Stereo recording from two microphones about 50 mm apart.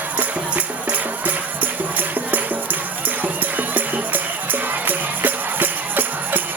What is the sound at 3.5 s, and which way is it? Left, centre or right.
Music, right.